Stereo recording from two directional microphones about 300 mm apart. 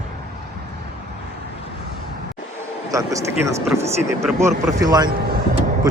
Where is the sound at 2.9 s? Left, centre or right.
Centre.